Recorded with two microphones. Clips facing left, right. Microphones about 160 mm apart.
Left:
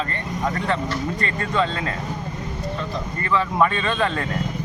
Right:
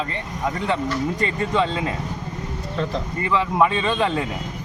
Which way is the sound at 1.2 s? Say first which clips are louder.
Right 1 dB; 15° right (ahead or behind).